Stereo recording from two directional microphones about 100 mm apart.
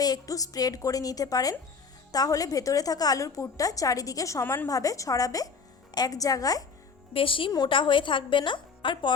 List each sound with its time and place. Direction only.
0.0 s a woman's voice: 40° left (ahead or behind)
7.1 s a woman's voice: 60° left (ahead or behind)